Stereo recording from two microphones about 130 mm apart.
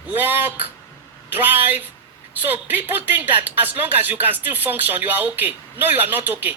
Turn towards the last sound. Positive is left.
turn(degrees=-15)  # may be behind; listen again after turning